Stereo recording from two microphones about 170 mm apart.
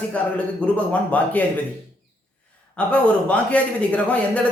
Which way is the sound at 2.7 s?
5° left (ahead or behind).